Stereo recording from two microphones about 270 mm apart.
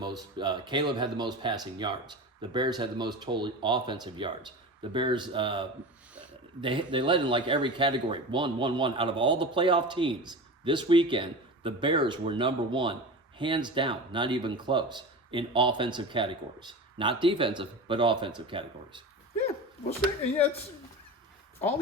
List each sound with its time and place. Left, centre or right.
0.0 s speech: centre